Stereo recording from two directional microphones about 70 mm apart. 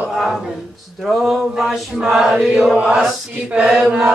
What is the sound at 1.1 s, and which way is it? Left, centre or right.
Chant, centre.